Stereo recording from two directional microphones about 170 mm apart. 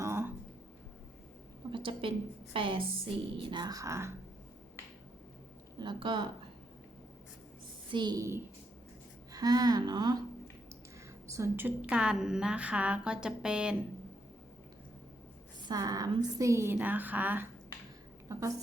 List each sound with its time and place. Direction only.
0.0 s a sound: 15° right (ahead or behind)
1.7 s a sound: 30° right (ahead or behind)
3.3 s speech: 25° right (ahead or behind)
5.8 s speech: 30° right (ahead or behind)
7.9 s speech: 25° right (ahead or behind)
11.3 s a woman's voice: 15° right (ahead or behind)
15.6 s a woman's voice: 20° right (ahead or behind)